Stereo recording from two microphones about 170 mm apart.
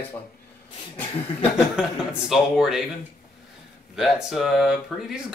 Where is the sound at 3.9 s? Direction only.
Centre (ahead or behind).